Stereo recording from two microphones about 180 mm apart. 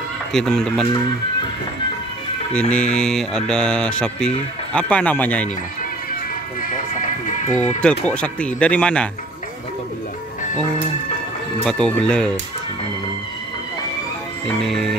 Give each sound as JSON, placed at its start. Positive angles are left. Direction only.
{"t": 0.3, "sound": "mantra", "side_deg": 5}
{"t": 2.7, "sound": "mantra", "side_deg": 5}
{"t": 4.7, "sound": "speech", "side_deg": 5}
{"t": 7.5, "sound": "speech", "side_deg": 5}
{"t": 11.6, "sound": "mantra", "side_deg": 5}
{"t": 14.4, "sound": "mantra", "side_deg": 0}